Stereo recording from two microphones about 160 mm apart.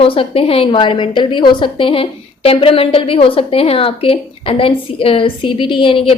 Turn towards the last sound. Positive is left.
turn(degrees=35)  # may be behind; listen again after turning